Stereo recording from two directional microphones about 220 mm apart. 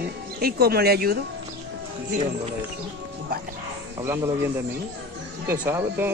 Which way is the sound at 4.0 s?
15° right (ahead or behind).